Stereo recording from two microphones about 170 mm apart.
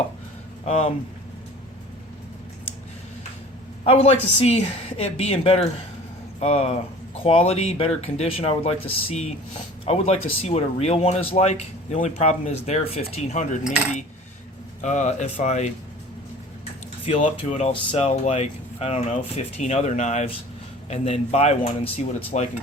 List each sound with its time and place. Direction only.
0.7 s speech: 35° left (ahead or behind)
3.8 s speech: 40° left (ahead or behind)
9.8 s speech: 35° left (ahead or behind)
17.1 s speech: 35° left (ahead or behind)